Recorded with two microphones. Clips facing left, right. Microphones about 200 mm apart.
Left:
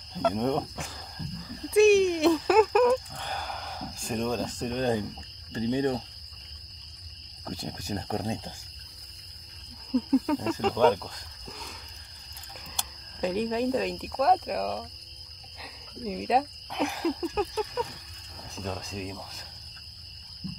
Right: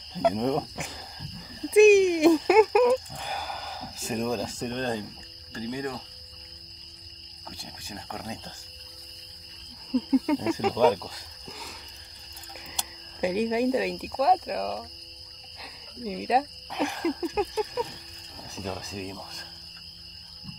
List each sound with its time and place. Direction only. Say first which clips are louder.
0.2 s speech: right 2 dB; 5° right (ahead or behind)
1.7 s a sound: right 3 dB; 15° right (ahead or behind)
4.7 s speech: left 4 dB; 10° left (ahead or behind)
5.5 s speech: left 6 dB; 25° left (ahead or behind)
7.4 s speech: left 8 dB; 45° left (ahead or behind)
9.9 s cricket: right 1 dB; 5° right (ahead or behind)
12.7 s speech: even; 10° right (ahead or behind)
17.2 s cricket: right 2 dB; 10° right (ahead or behind)
18.6 s speech: right 1 dB; centre (ahead or behind)